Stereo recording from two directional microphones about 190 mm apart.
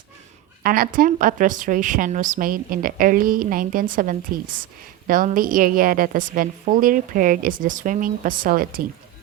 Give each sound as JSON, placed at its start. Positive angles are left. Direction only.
{"t": 0.6, "sound": "a woman's voice", "side_deg": -50}